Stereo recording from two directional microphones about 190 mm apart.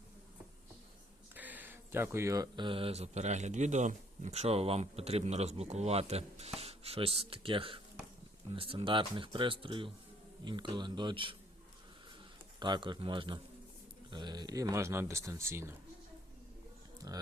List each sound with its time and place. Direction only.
1.4 s speech: 10° right (ahead or behind); by 11.3 s 25° right (ahead or behind)
12.5 s speech: 25° right (ahead or behind)